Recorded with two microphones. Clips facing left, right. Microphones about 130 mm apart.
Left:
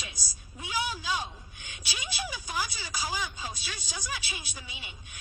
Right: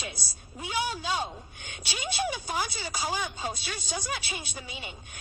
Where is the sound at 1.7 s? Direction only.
35° right (ahead or behind).